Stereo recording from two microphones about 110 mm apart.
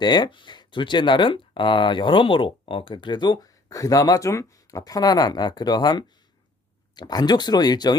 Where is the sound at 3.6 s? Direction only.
30° left (ahead or behind).